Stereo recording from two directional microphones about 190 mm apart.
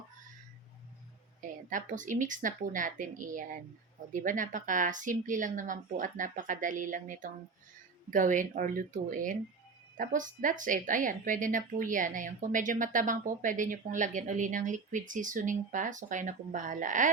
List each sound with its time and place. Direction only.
1.4 s speech: 45° right (ahead or behind)